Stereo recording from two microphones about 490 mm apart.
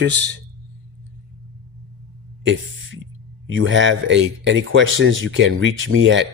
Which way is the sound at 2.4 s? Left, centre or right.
Right.